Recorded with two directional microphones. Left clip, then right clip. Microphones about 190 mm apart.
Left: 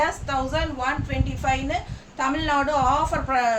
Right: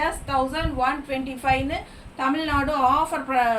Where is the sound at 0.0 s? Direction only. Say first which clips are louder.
Even; 15° left (ahead or behind).